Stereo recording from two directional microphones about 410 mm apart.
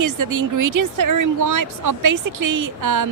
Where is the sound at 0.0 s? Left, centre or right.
Right.